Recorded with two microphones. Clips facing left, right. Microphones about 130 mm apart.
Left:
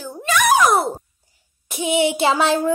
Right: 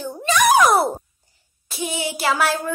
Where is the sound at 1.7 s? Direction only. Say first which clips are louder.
Left 8 dB; 20° left (ahead or behind).